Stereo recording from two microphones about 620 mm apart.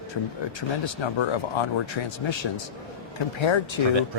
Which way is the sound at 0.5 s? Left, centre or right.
Left.